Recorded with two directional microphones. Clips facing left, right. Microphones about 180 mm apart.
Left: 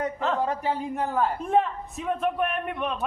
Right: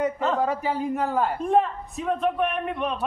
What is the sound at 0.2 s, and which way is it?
A man's voice, centre (ahead or behind).